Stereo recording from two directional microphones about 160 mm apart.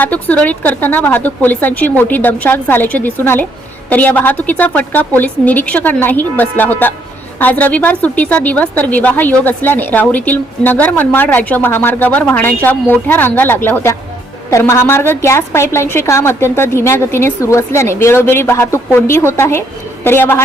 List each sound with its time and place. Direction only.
0.0 s a woman's voice: 10° left (ahead or behind)